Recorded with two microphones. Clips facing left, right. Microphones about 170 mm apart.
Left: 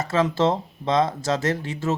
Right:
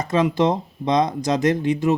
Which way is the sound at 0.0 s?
15° right (ahead or behind).